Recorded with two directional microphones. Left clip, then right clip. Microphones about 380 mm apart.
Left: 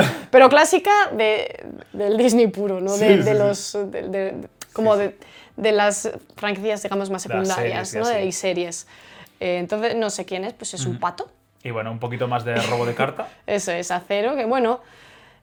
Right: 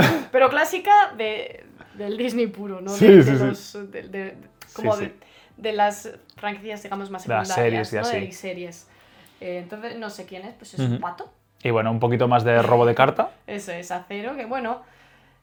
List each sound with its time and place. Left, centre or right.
0.3 s speech: left
3.1 s speech: right
3.5 s a woman's voice: left
7.3 s speech: right
8.1 s a woman's voice: left
11.6 s speech: right
13.4 s a woman's voice: left